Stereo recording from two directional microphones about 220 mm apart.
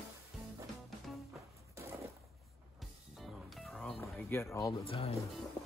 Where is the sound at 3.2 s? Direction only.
Centre (ahead or behind).